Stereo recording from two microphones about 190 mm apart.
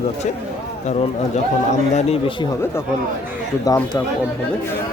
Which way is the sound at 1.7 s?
35° left (ahead or behind).